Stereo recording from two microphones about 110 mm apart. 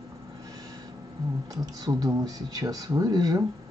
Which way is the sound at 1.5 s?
35° right (ahead or behind).